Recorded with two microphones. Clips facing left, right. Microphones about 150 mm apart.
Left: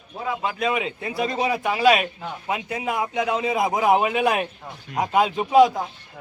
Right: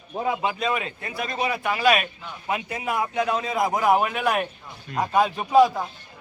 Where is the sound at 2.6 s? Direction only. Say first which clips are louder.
Left 1 dB; 15° left (ahead or behind).